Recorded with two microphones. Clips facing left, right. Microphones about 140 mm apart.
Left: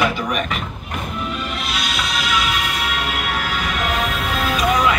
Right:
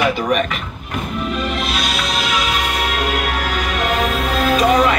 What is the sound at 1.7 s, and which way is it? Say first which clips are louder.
Music: right 3 dB; 45° right (ahead or behind).